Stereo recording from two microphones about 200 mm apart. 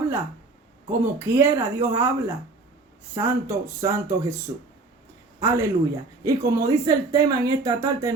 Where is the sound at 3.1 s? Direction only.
15° right (ahead or behind).